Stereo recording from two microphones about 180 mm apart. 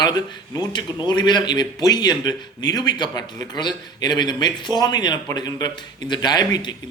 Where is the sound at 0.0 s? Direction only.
20° left (ahead or behind).